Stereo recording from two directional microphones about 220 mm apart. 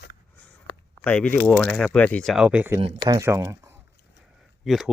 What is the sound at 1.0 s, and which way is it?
Speech, 5° left (ahead or behind).